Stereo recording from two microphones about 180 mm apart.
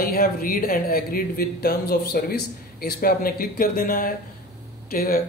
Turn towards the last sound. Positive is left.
turn(degrees=55)  # may be behind; listen again after turning